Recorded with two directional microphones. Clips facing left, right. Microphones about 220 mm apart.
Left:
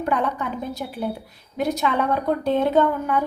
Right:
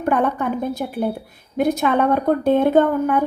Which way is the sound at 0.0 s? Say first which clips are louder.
Right 4 dB; 50° right (ahead or behind).